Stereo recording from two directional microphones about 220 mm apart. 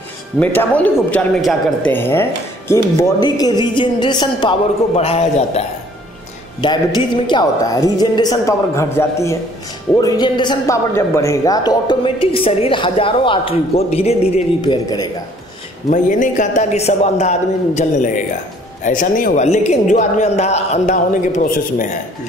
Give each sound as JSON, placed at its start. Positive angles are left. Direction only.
{"t": 0.4, "sound": "a man's voice", "side_deg": 10}
{"t": 15.9, "sound": "a man's voice", "side_deg": 35}